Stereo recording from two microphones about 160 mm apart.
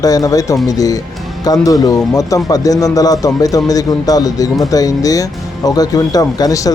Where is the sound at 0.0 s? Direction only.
20° left (ahead or behind).